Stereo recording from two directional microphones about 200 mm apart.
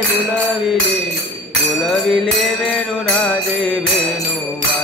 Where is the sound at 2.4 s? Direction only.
5° left (ahead or behind).